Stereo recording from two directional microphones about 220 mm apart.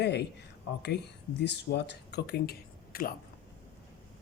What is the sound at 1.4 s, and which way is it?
Speech, 50° left (ahead or behind).